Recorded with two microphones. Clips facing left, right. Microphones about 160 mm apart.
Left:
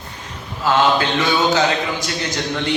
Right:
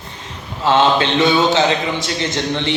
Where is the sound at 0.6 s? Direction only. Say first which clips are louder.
Right 2 dB; 25° right (ahead or behind).